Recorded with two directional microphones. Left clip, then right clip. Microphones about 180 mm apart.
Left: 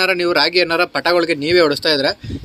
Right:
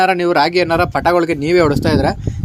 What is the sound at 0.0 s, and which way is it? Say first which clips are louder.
A man's voice: right 2 dB; 55° right (ahead or behind).